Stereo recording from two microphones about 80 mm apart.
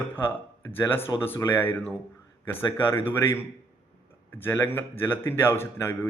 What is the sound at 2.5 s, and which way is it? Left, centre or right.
Speech, left.